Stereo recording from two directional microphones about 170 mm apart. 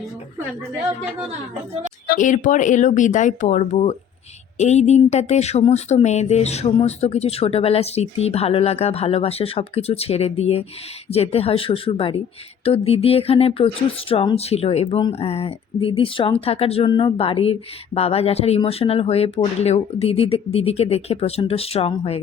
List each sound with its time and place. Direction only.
2.0 s speech: 50° left (ahead or behind)